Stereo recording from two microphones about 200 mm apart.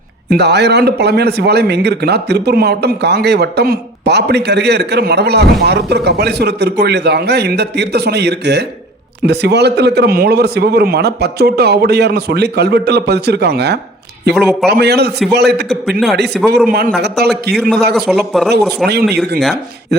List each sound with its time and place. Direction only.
0.3 s a man's voice: 55° right (ahead or behind)
15.7 s a man's voice: centre (ahead or behind)
16.6 s a man's voice: 45° right (ahead or behind)
17.9 s a man's voice: 5° right (ahead or behind)
18.9 s speech: 55° right (ahead or behind)